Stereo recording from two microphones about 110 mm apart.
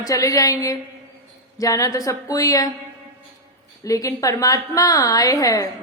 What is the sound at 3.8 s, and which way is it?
A woman's voice, 30° left (ahead or behind).